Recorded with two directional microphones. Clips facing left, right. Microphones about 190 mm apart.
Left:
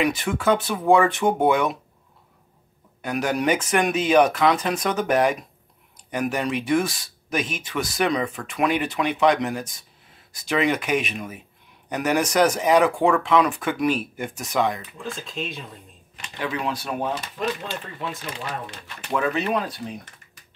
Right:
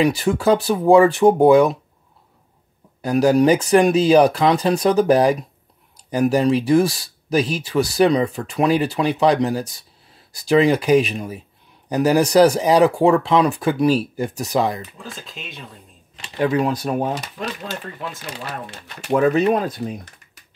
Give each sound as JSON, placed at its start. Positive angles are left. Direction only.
{"t": 0.0, "sound": "speech", "side_deg": -35}
{"t": 3.0, "sound": "speech", "side_deg": -35}
{"t": 14.8, "sound": "speech", "side_deg": 0}
{"t": 16.2, "sound": "speech", "side_deg": -40}
{"t": 19.1, "sound": "speech", "side_deg": -40}